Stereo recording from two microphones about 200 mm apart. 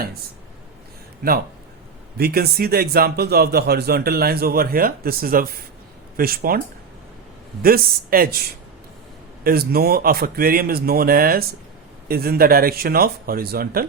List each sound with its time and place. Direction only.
2.1 s speech: 50° right (ahead or behind)
7.6 s speech: 45° right (ahead or behind)
9.4 s speech: 50° right (ahead or behind)